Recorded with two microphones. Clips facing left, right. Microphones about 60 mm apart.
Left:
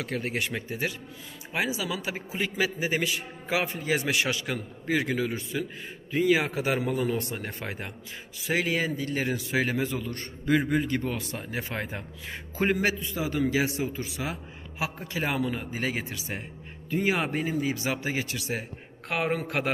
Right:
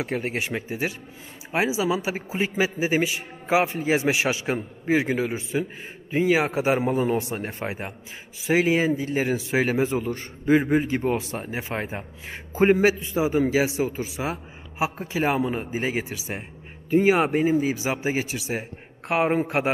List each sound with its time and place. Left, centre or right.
0.0 s a man's voice: right